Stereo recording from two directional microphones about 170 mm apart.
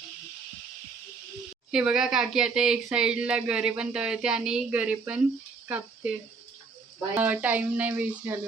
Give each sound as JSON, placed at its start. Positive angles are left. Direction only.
{"t": 1.7, "sound": "speech", "side_deg": -5}
{"t": 5.6, "sound": "a sound", "side_deg": -10}
{"t": 7.2, "sound": "speech", "side_deg": -10}